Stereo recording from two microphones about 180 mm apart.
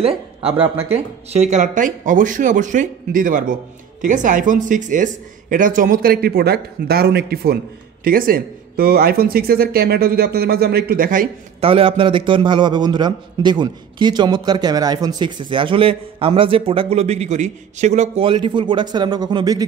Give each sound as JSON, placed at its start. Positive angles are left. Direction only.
{"t": 0.0, "sound": "speech", "side_deg": -30}
{"t": 11.6, "sound": "a man's voice", "side_deg": -30}